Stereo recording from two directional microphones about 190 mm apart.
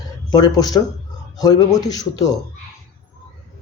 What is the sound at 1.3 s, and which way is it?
Speech, 20° left (ahead or behind).